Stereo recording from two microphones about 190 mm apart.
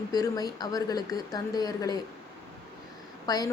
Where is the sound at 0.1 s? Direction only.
20° left (ahead or behind).